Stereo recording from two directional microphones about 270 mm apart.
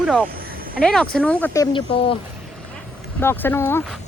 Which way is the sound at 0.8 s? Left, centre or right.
Centre.